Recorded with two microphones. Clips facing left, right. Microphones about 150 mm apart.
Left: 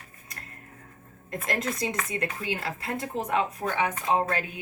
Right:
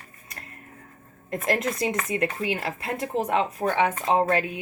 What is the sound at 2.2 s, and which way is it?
Speech, 20° right (ahead or behind).